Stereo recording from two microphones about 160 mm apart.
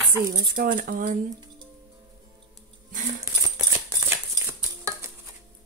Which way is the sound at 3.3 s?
25° right (ahead or behind).